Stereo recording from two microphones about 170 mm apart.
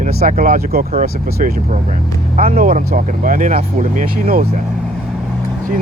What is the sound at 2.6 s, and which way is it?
Speech, 50° right (ahead or behind).